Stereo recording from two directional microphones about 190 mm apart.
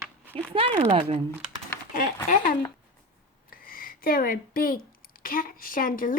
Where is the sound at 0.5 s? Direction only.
30° right (ahead or behind).